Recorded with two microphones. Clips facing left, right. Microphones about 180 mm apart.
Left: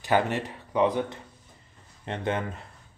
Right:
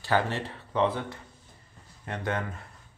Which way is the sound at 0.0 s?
15° left (ahead or behind).